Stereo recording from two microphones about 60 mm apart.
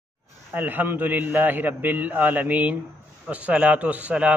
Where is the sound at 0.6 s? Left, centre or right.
Right.